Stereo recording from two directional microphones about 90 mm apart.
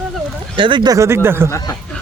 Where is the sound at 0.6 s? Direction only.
60° right (ahead or behind).